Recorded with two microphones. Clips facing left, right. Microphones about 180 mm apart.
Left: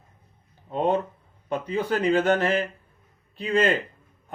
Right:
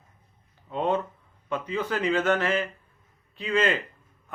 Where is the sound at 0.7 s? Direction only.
35° left (ahead or behind).